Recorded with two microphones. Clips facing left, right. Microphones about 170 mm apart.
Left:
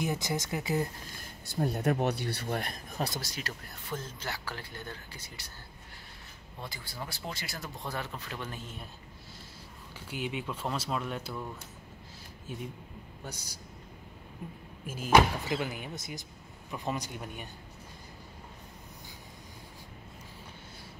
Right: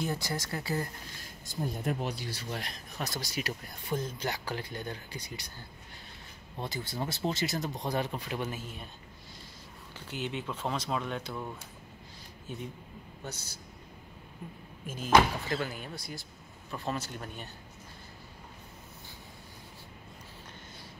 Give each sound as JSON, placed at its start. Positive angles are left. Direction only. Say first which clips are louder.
{"t": 0.0, "sound": "speech", "louder": "left 2 dB", "side_deg": 20}
{"t": 1.5, "sound": "speech", "louder": "left 4 dB", "side_deg": 70}
{"t": 3.3, "sound": "speech", "louder": "right 4 dB", "side_deg": -15}
{"t": 6.6, "sound": "speech", "louder": "right 6 dB", "side_deg": -25}
{"t": 9.9, "sound": "speech", "louder": "even", "side_deg": 10}
{"t": 12.5, "sound": "speech", "louder": "even", "side_deg": 5}
{"t": 14.9, "sound": "speech", "louder": "left 1 dB", "side_deg": 10}